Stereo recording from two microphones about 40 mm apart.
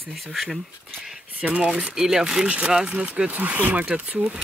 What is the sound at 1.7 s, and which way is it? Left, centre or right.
Speech, centre.